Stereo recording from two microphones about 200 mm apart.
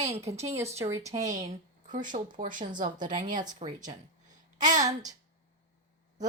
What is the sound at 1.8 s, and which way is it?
Speech, 40° right (ahead or behind).